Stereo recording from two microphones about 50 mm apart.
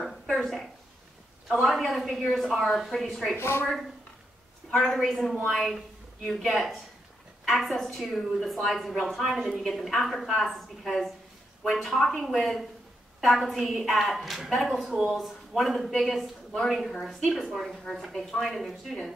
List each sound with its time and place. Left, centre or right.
0.3 s a sound: centre
1.5 s a woman's voice: centre
3.3 s speech: left
4.6 s a woman's voice: centre